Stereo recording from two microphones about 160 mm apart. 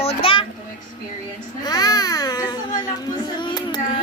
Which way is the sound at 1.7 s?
25° left (ahead or behind).